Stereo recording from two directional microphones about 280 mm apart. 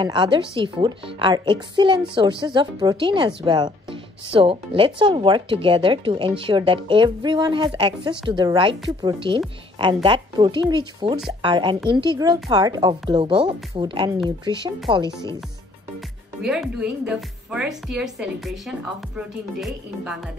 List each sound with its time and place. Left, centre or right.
0.0 s a woman's voice: centre
16.4 s speech: centre